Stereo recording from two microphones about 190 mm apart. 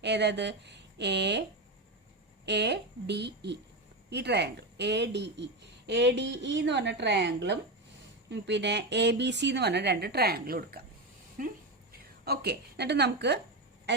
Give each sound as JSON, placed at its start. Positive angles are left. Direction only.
{"t": 0.0, "sound": "speech", "side_deg": -65}
{"t": 2.5, "sound": "a woman's voice", "side_deg": -65}